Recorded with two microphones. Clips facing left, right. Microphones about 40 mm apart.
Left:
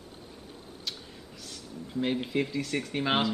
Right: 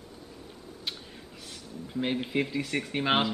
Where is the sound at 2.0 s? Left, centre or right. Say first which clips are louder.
Even; centre.